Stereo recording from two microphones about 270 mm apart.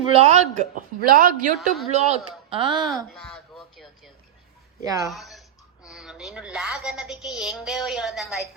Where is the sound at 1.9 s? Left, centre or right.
Right.